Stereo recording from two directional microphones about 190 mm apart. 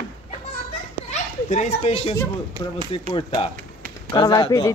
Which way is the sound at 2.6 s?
25° left (ahead or behind).